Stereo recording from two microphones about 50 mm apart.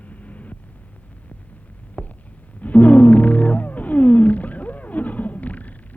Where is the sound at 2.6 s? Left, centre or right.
Left.